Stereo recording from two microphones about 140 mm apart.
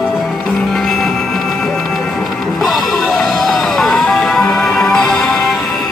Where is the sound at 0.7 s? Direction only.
Centre (ahead or behind).